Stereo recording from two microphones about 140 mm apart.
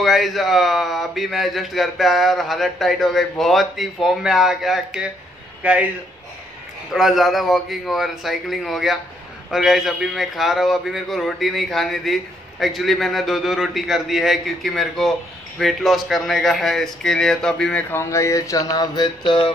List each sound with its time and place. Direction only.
0.0 s a man's voice: centre (ahead or behind)
6.9 s a man's voice: centre (ahead or behind)
17.9 s mantra: 20° left (ahead or behind)